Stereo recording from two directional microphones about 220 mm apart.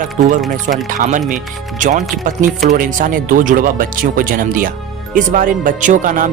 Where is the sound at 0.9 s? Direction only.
35° right (ahead or behind).